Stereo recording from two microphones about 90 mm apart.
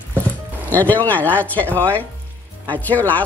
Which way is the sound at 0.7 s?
20° left (ahead or behind).